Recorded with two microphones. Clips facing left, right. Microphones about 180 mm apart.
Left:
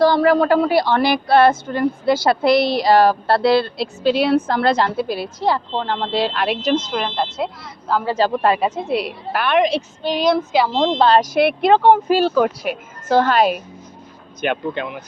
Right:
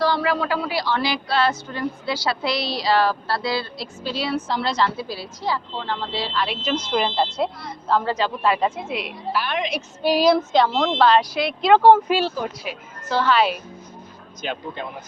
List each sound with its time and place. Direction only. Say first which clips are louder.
0.0 s a woman's voice: left 8 dB; 45° left (ahead or behind)
6.5 s a woman's voice: left 7 dB; 40° left (ahead or behind)
6.9 s speech: right 1 dB; centre (ahead or behind)
8.3 s speech: left 4 dB; 55° left (ahead or behind)
8.5 s a woman's voice: left 2 dB; 15° left (ahead or behind)
8.8 s a woman's voice: left 7 dB; 35° left (ahead or behind)
9.3 s speech: left 8 dB; 60° left (ahead or behind)
10.0 s speech: right 2 dB; 5° right (ahead or behind)
10.8 s speech: left 5 dB; 25° left (ahead or behind)
11.2 s speech: left 7 dB; 55° left (ahead or behind)
12.0 s a woman's voice: left 5 dB; 40° left (ahead or behind)
12.4 s a woman's voice: left 10 dB; 55° left (ahead or behind)
14.4 s speech: left 7 dB; 70° left (ahead or behind)